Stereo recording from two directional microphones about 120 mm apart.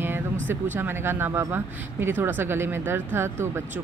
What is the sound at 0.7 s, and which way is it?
A woman's voice, 20° right (ahead or behind).